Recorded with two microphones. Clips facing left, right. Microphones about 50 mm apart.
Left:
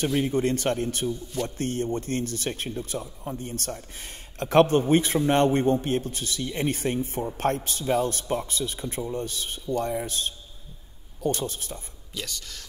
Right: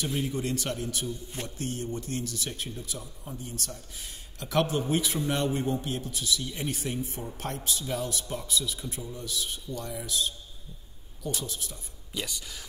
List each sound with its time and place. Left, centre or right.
0.0 s speech: left
12.1 s speech: centre